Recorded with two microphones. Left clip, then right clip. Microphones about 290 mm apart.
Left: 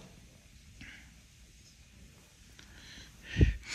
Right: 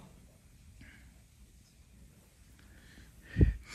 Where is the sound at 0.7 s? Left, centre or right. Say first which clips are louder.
Left 7 dB; right.